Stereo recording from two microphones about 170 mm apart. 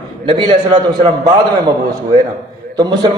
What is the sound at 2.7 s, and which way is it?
Speech, 25° right (ahead or behind).